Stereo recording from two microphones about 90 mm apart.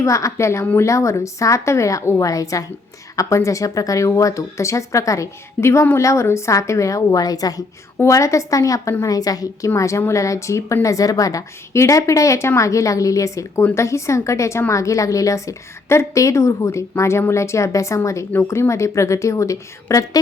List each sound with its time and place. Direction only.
0.0 s speech: 35° left (ahead or behind)